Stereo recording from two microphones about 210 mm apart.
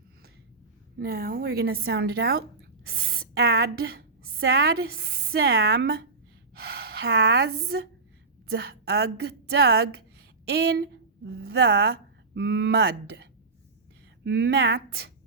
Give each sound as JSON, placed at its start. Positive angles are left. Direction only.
{"t": 0.9, "sound": "a woman's voice", "side_deg": -45}
{"t": 14.3, "sound": "speech", "side_deg": -50}